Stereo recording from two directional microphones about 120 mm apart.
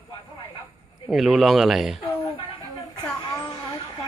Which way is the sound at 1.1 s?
Centre (ahead or behind).